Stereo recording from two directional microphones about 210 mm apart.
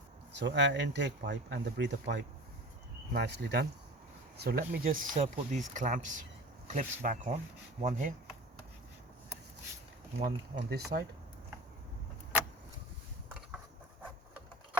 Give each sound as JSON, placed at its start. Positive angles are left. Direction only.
{"t": 0.3, "sound": "speech", "side_deg": -55}
{"t": 10.2, "sound": "speech", "side_deg": -50}